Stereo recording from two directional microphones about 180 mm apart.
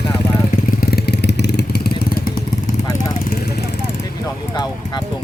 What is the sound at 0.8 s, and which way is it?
Vehicle, 60° left (ahead or behind).